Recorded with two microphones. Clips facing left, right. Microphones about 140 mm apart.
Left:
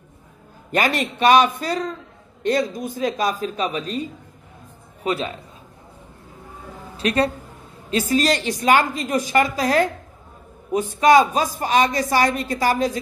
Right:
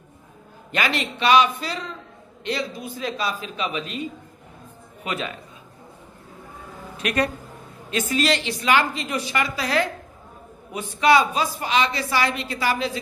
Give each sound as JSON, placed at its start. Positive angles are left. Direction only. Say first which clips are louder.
{"t": 0.7, "sound": "a woman's voice", "louder": "left 4 dB", "side_deg": 45}
{"t": 7.0, "sound": "a woman's voice", "louder": "left 4 dB", "side_deg": 30}